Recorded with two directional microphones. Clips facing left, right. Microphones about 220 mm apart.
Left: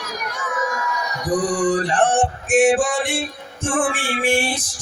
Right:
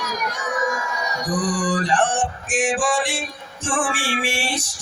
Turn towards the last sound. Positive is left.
turn(degrees=55)  # may be behind; listen again after turning